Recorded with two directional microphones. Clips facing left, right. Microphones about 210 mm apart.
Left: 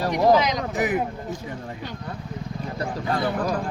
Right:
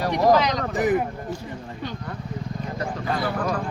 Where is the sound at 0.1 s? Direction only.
15° left (ahead or behind).